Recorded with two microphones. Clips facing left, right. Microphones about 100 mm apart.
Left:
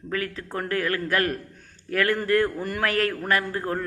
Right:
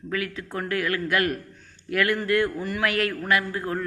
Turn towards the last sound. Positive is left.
turn(degrees=35)  # may be behind; listen again after turning